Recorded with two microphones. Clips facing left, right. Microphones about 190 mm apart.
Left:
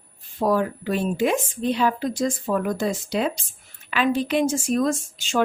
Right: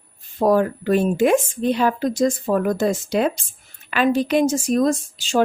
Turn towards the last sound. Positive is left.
turn(degrees=-35)  # may be behind; listen again after turning